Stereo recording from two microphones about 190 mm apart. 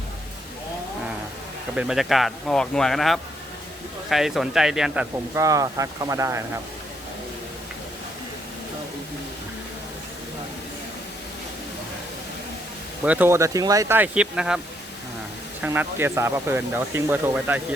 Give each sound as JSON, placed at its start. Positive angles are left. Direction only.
{"t": 1.7, "sound": "speech", "side_deg": -5}
{"t": 5.3, "sound": "speech", "side_deg": -15}
{"t": 13.1, "sound": "speech", "side_deg": -10}
{"t": 15.6, "sound": "speech", "side_deg": -10}